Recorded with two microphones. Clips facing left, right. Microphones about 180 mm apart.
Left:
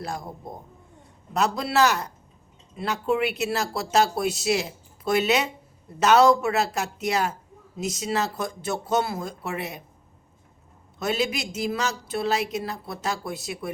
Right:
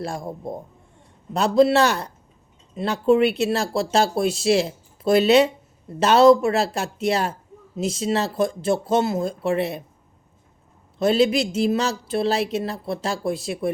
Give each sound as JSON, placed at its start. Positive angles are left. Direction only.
{"t": 0.0, "sound": "speech", "side_deg": -30}
{"t": 1.3, "sound": "speech", "side_deg": -30}
{"t": 10.9, "sound": "speech", "side_deg": -30}